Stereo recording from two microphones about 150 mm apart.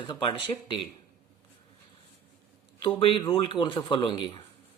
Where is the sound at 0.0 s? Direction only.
30° left (ahead or behind).